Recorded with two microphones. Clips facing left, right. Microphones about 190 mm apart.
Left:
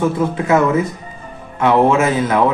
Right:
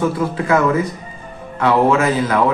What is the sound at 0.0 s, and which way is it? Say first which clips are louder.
Speech: left 2 dB; 20° left (ahead or behind).